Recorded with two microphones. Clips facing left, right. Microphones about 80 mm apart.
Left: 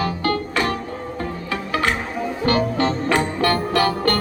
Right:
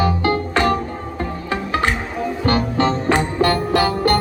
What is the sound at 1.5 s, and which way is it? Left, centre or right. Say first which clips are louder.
Music: right 2 dB; right.